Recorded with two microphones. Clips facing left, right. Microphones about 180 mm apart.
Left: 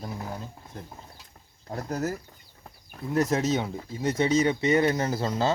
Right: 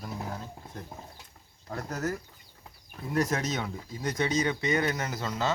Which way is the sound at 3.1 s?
30° left (ahead or behind).